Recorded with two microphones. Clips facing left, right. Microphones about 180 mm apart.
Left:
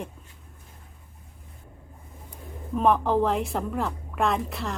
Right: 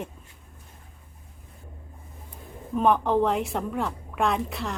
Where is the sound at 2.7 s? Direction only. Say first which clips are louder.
Even; centre (ahead or behind).